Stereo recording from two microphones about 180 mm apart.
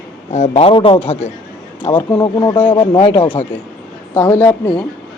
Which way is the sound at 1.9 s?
20° left (ahead or behind).